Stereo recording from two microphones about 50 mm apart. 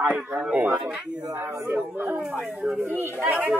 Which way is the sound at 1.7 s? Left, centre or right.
Right.